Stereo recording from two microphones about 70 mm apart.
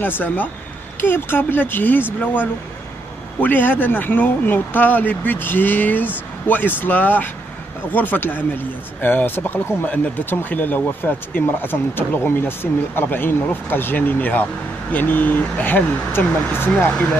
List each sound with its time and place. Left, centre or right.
0.0 s speech: left